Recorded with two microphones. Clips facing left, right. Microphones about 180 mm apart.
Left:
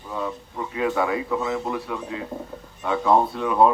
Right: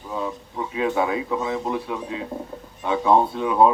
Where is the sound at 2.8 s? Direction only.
10° right (ahead or behind).